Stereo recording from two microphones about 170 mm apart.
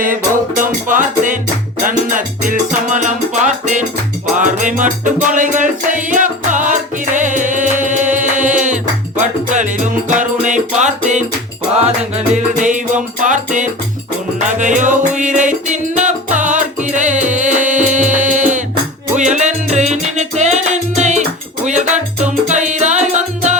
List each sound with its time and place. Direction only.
0.0 s music: 50° right (ahead or behind)
12.6 s music: 50° right (ahead or behind)